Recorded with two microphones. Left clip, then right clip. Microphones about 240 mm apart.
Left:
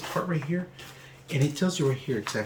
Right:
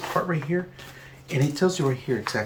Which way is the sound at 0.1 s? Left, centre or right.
Centre.